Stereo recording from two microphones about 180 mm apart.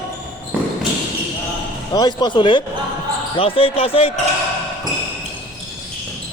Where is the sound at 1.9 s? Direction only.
25° left (ahead or behind).